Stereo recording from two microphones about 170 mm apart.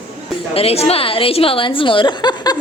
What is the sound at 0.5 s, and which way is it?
A woman's voice, 35° left (ahead or behind).